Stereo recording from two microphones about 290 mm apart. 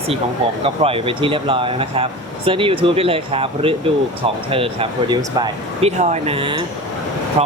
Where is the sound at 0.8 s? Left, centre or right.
Centre.